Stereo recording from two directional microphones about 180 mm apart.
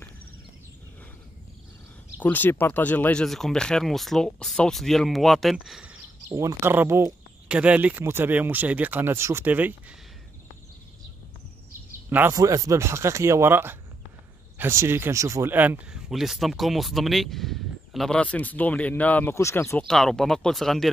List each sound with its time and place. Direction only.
2.1 s speech: 10° left (ahead or behind)
6.2 s speech: 15° right (ahead or behind)
12.1 s speech: 15° right (ahead or behind); by 19.8 s 15° left (ahead or behind)
19.9 s speech: 5° left (ahead or behind)